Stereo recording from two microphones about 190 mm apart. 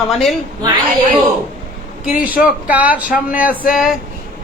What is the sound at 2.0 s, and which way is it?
A man's voice, 5° right (ahead or behind).